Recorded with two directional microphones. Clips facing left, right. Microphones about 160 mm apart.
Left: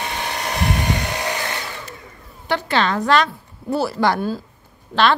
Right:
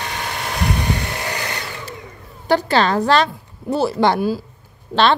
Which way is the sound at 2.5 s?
40° right (ahead or behind).